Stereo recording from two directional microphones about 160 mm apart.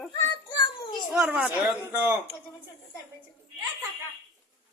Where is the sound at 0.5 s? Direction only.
30° left (ahead or behind).